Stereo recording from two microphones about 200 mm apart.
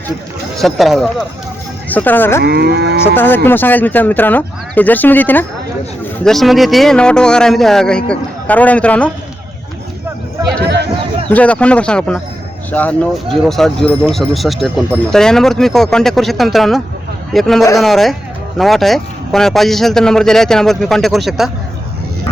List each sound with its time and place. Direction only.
0.6 s speech: centre (ahead or behind)
2.4 s moo: 55° right (ahead or behind)
3.0 s speech: 10° left (ahead or behind)
11.3 s speech: 5° left (ahead or behind)